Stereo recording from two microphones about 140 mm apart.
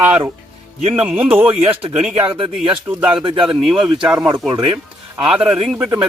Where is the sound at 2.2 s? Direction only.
35° right (ahead or behind).